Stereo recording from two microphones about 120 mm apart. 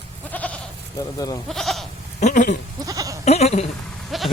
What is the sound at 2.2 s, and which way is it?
Speech, 90° left.